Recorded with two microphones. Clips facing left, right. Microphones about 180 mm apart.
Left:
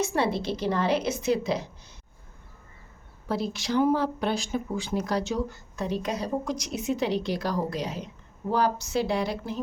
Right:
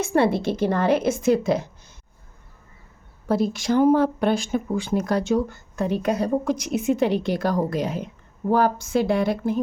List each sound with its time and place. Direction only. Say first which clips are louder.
0.0 s speech: right 6 dB; 55° right (ahead or behind)
3.2 s speech: right 7 dB; 50° right (ahead or behind)